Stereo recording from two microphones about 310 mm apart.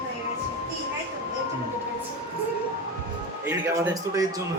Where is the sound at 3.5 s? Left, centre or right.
Centre.